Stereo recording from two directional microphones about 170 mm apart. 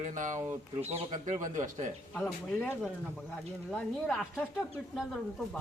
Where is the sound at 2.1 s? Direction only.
10° left (ahead or behind).